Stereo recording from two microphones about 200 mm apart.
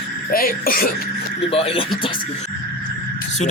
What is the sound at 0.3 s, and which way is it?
Speech, 45° left (ahead or behind).